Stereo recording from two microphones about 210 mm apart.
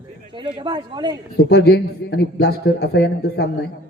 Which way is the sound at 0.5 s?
20° right (ahead or behind).